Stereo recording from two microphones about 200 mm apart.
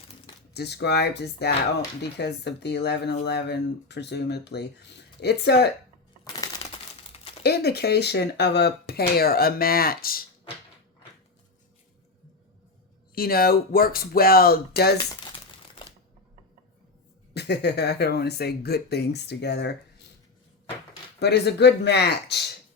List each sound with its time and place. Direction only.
0.5 s speech: 55° left (ahead or behind)
7.4 s speech: 55° left (ahead or behind)
13.1 s speech: 50° left (ahead or behind)
17.3 s speech: 55° left (ahead or behind)
21.2 s speech: 55° left (ahead or behind)